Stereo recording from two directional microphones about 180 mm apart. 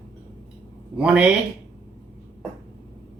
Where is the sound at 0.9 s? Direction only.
5° right (ahead or behind).